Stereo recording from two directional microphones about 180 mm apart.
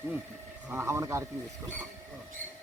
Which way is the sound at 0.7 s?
15° right (ahead or behind).